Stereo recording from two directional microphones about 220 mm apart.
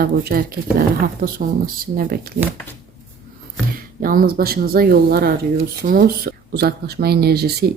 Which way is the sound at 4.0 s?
40° right (ahead or behind).